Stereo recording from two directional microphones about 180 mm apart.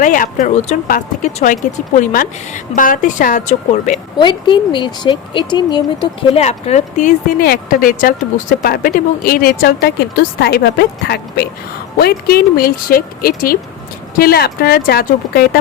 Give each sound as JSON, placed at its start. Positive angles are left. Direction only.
{"t": 0.0, "sound": "a woman's voice", "side_deg": 45}
{"t": 4.2, "sound": "speech", "side_deg": 25}
{"t": 6.4, "sound": "a woman's voice", "side_deg": 40}